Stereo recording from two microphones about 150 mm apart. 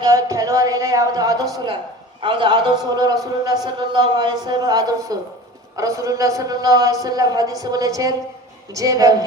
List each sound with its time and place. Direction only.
0.0 s a man's voice: 25° right (ahead or behind)